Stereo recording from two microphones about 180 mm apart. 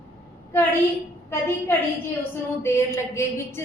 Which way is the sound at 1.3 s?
15° left (ahead or behind).